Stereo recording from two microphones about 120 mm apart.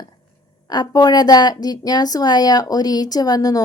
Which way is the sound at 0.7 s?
35° left (ahead or behind).